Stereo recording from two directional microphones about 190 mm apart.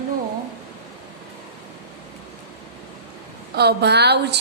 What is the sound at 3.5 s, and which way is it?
Speech, 60° right (ahead or behind).